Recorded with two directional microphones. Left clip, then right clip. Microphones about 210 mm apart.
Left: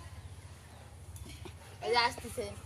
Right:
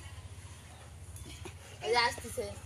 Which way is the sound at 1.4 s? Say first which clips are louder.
Right 1 dB; 5° left (ahead or behind).